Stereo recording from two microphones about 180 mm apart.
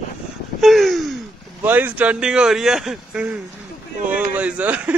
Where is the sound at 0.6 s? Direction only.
Centre (ahead or behind).